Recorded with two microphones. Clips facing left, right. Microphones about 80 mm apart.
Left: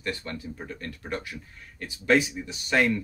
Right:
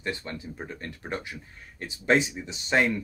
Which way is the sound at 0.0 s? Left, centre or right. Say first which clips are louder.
Even; right.